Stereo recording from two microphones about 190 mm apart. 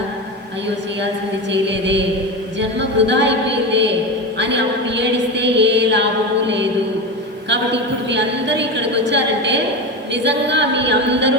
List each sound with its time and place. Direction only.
1.6 s a woman's voice: 70° right (ahead or behind)
7.5 s a woman's voice: 65° right (ahead or behind)